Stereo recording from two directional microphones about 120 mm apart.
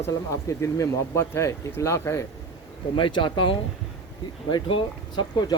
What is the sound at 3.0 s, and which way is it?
Speech, 40° left (ahead or behind).